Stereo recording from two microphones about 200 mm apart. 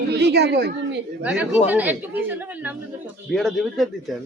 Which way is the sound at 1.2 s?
10° right (ahead or behind).